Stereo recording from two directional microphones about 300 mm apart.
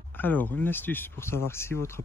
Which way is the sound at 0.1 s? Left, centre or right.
Centre.